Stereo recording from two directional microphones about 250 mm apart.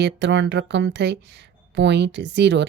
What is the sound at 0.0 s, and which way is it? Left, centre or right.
Speech, right.